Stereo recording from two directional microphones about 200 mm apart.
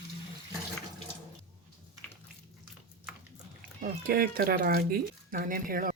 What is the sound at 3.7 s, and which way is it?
Speech, 45° right (ahead or behind).